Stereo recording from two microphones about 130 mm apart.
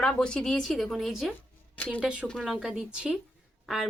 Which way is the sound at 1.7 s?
10° left (ahead or behind).